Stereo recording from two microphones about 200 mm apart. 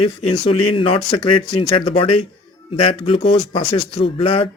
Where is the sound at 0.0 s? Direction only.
30° left (ahead or behind).